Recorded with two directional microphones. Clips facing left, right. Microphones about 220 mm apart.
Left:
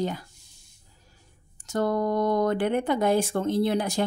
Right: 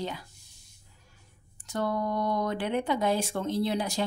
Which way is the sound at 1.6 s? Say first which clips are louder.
Left 5 dB; 45° left (ahead or behind).